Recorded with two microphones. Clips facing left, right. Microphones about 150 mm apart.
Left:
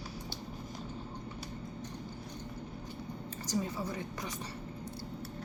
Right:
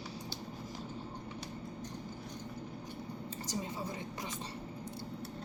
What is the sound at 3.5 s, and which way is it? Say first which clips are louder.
Speech: left 5 dB; 25° right (ahead or behind).